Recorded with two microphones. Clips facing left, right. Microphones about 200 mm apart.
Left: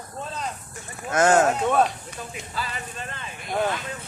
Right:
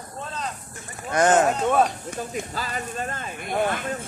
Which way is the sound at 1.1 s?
Centre (ahead or behind).